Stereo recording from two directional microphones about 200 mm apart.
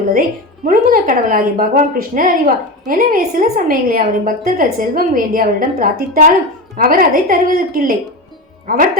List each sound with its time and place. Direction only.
0.1 s a woman's voice: 45° right (ahead or behind)